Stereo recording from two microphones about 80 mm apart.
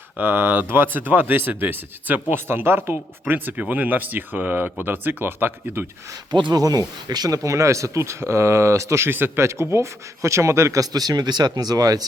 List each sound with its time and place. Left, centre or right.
0.2 s speech: right
6.3 s speech: right
6.6 s speech: right